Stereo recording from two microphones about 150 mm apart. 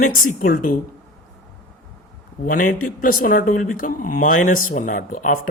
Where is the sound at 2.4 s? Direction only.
60° left (ahead or behind).